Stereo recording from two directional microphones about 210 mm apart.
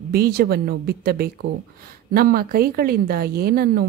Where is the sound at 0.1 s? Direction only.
45° right (ahead or behind).